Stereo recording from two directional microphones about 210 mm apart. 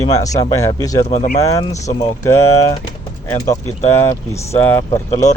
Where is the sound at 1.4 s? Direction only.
15° left (ahead or behind).